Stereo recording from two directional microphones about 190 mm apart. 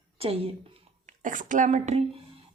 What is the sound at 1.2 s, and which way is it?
Speech, 45° right (ahead or behind).